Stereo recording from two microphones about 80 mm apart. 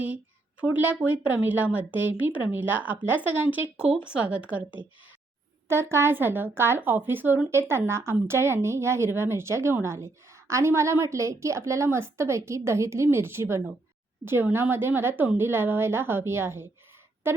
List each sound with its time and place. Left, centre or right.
0.6 s a woman's voice: right
4.0 s speech: centre
5.6 s a woman's voice: right